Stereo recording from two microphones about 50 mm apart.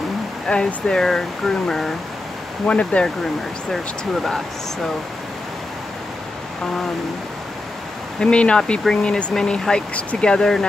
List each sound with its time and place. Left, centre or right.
0.5 s speech: centre
2.6 s speech: left
3.7 s speech: centre
8.2 s speech: left